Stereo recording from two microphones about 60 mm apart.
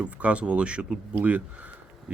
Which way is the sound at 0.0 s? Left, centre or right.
Centre.